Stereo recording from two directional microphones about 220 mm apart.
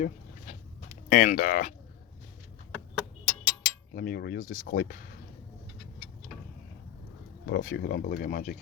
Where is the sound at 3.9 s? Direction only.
40° left (ahead or behind).